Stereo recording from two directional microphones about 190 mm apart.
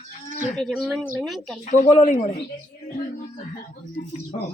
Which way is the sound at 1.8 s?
40° left (ahead or behind).